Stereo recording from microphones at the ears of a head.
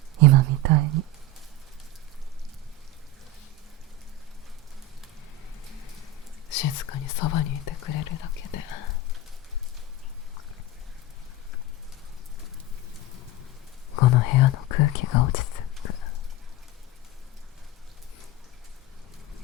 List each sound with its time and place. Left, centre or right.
0.2 s whispering: right
6.5 s whispering: left
12.9 s pigeon: left
13.9 s whispering: left